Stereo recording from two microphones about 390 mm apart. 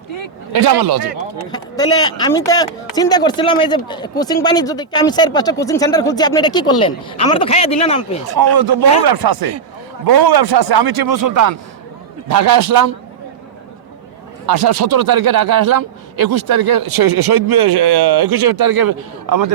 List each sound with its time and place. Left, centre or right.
0.5 s speech: right
1.5 s speech: centre
8.4 s speech: right
14.4 s speech: right